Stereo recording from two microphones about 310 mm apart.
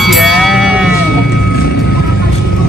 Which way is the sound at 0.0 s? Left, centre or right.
Centre.